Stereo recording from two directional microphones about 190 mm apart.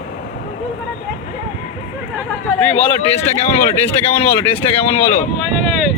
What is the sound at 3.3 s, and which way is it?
Speech, 35° left (ahead or behind).